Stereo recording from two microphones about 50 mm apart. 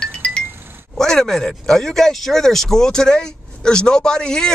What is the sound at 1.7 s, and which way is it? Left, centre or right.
Speech, centre.